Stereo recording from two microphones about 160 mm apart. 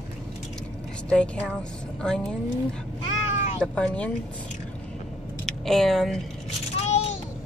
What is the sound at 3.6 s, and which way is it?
Speech, 10° left (ahead or behind).